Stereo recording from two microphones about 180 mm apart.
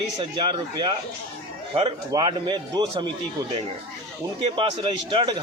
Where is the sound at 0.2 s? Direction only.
30° right (ahead or behind).